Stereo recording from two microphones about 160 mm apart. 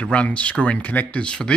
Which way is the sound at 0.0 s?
10° left (ahead or behind).